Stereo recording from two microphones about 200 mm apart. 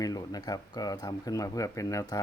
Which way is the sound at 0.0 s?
20° left (ahead or behind).